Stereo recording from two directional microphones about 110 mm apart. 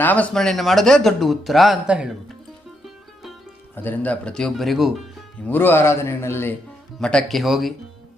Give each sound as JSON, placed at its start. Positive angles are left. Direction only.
{"t": 0.0, "sound": "speech", "side_deg": 15}
{"t": 0.3, "sound": "speech", "side_deg": 0}
{"t": 3.8, "sound": "speech", "side_deg": 15}
{"t": 5.4, "sound": "speech", "side_deg": 15}
{"t": 7.0, "sound": "speech", "side_deg": 10}